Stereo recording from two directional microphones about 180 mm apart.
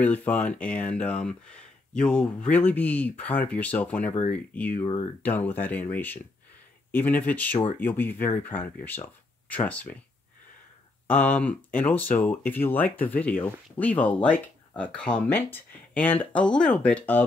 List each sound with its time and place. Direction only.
0.0 s speech: 10° left (ahead or behind)
11.1 s speech: 10° left (ahead or behind)